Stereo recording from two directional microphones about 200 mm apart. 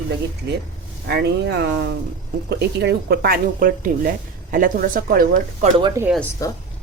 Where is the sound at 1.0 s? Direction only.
55° right (ahead or behind).